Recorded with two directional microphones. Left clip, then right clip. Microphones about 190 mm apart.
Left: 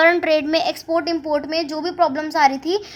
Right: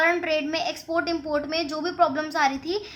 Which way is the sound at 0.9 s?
30° left (ahead or behind).